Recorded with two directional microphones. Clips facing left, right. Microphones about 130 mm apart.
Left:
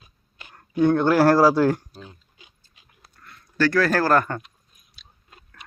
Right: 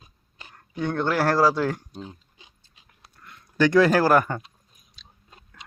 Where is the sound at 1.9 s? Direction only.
25° right (ahead or behind).